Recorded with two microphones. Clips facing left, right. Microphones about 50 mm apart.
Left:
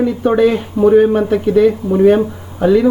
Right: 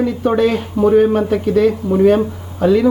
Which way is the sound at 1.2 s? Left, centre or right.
Centre.